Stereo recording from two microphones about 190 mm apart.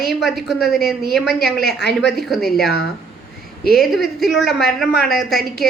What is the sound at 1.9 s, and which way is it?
A woman's voice, 5° left (ahead or behind).